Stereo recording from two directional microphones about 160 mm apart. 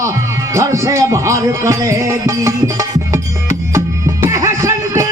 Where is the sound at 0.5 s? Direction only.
15° right (ahead or behind).